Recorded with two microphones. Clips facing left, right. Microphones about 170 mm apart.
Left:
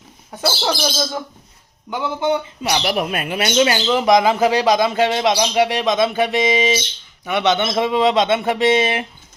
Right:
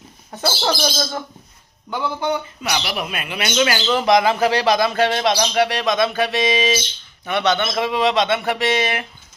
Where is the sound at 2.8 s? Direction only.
45° left (ahead or behind); by 3.8 s 25° left (ahead or behind).